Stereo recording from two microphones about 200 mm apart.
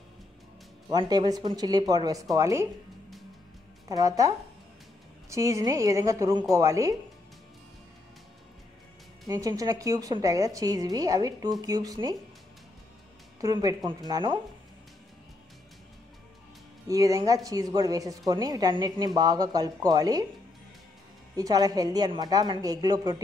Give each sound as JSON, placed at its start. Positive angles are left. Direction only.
{"t": 0.8, "sound": "speech", "side_deg": -20}
{"t": 3.9, "sound": "a woman's voice", "side_deg": -15}
{"t": 5.3, "sound": "a woman's voice", "side_deg": -15}
{"t": 9.3, "sound": "a woman's voice", "side_deg": -20}
{"t": 13.4, "sound": "speech", "side_deg": -20}
{"t": 16.8, "sound": "speech", "side_deg": -15}
{"t": 21.4, "sound": "speech", "side_deg": -20}